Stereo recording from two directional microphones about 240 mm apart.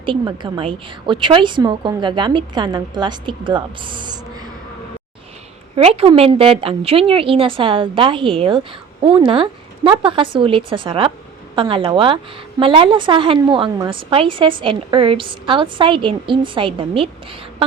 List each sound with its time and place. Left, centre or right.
0.0 s a woman's voice: centre
5.7 s a woman's voice: right